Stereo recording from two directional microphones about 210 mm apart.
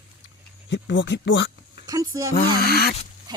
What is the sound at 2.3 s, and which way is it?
Speech, 45° left (ahead or behind).